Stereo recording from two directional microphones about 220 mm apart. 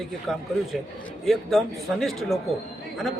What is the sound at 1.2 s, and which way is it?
A man's voice, centre (ahead or behind).